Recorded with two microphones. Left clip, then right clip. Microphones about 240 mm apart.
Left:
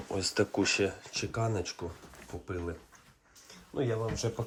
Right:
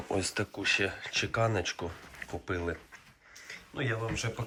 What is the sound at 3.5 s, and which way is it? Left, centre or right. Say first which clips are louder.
Speech: left 1 dB; left.